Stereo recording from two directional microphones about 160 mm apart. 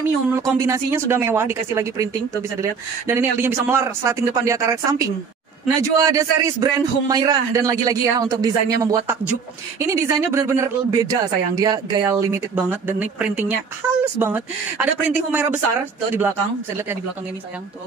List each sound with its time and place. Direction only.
0.4 s a man's voice: 20° right (ahead or behind)